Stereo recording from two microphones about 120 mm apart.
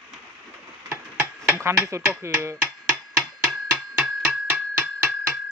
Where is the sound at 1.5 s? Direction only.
20° right (ahead or behind).